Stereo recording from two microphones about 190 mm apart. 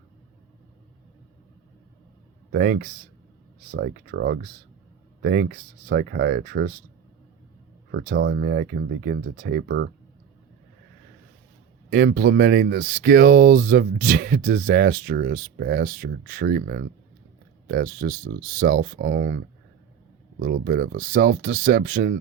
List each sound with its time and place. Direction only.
2.5 s speech: 55° right (ahead or behind)
7.9 s speech: 65° right (ahead or behind)
11.9 s speech: 55° right (ahead or behind)
20.4 s speech: 60° right (ahead or behind)